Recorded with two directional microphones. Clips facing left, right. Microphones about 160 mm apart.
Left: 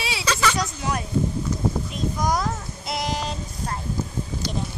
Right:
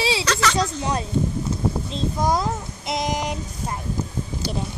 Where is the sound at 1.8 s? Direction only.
25° right (ahead or behind).